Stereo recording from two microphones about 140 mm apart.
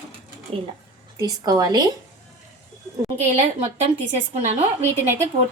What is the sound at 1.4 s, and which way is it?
Speech, 25° right (ahead or behind).